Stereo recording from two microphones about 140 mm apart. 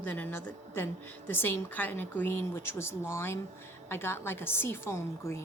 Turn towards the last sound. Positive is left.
turn(degrees=20)  # may be behind; listen again after turning